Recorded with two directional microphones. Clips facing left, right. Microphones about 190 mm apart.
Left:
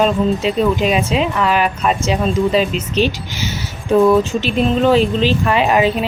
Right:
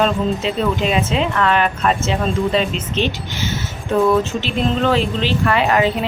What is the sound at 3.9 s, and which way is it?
A woman's voice, 15° left (ahead or behind).